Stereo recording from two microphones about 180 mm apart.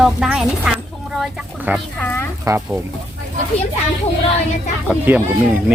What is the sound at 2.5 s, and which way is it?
Speech, 20° right (ahead or behind).